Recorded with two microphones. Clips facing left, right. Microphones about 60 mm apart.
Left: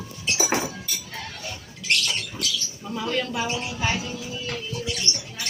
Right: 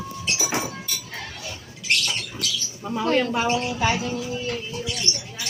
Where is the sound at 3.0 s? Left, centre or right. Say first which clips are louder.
Right 5 dB; right.